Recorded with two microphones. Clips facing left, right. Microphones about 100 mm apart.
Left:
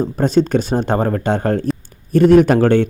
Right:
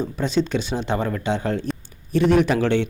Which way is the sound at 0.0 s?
45° left (ahead or behind).